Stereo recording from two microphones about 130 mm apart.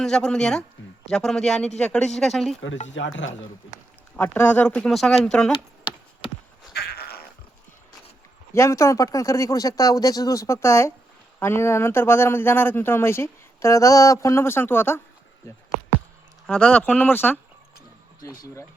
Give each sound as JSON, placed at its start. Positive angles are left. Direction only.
{"t": 0.0, "sound": "speech", "side_deg": 5}
{"t": 2.7, "sound": "speech", "side_deg": 70}
{"t": 4.2, "sound": "speech", "side_deg": 15}
{"t": 5.9, "sound": "a sound", "side_deg": 35}
{"t": 6.2, "sound": "horse", "side_deg": 45}
{"t": 8.5, "sound": "speech", "side_deg": 25}
{"t": 16.5, "sound": "speech", "side_deg": 10}
{"t": 18.2, "sound": "speech", "side_deg": 25}